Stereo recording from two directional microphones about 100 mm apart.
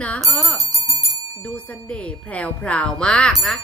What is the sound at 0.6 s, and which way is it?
Bell, 40° right (ahead or behind).